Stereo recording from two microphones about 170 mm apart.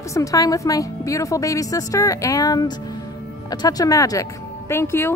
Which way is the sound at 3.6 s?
20° left (ahead or behind).